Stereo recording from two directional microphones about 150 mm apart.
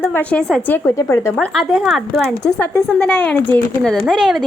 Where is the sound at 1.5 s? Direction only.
Centre (ahead or behind).